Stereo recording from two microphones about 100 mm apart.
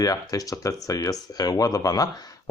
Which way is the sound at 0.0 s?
35° left (ahead or behind).